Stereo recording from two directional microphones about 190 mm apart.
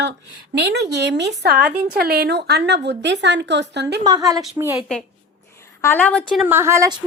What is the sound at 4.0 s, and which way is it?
Speech, 20° right (ahead or behind).